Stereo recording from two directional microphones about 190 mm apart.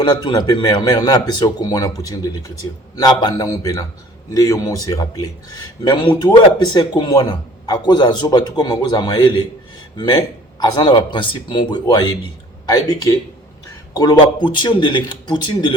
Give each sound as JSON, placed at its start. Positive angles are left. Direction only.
{"t": 0.0, "sound": "speech", "side_deg": 20}